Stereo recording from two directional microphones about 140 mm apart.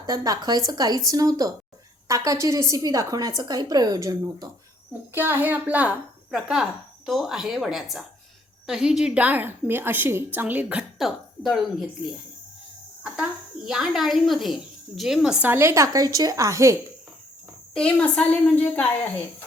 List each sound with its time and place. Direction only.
0.0 s a woman's voice: 30° right (ahead or behind)
5.1 s a woman's voice: 15° right (ahead or behind)
13.0 s a sound: 5° right (ahead or behind)
13.7 s a woman's voice: centre (ahead or behind); by 16.7 s 20° right (ahead or behind)
17.7 s a woman's voice: 5° left (ahead or behind)